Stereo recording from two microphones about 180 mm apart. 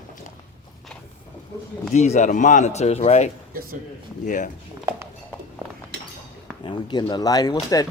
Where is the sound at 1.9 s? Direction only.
40° left (ahead or behind).